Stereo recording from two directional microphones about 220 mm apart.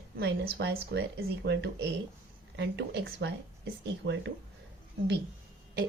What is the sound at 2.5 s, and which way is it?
A woman's voice, 50° right (ahead or behind).